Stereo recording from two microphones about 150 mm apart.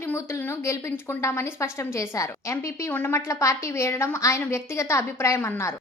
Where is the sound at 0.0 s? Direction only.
15° left (ahead or behind).